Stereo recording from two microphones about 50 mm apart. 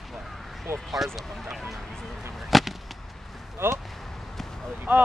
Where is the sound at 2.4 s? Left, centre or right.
Centre.